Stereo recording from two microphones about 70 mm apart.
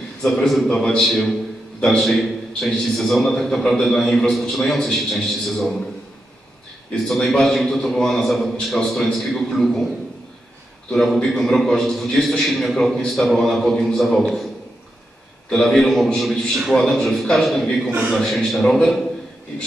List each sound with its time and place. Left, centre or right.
0.2 s a man's voice: centre
7.1 s a man's voice: centre
10.9 s a man's voice: centre
15.5 s a man's voice: centre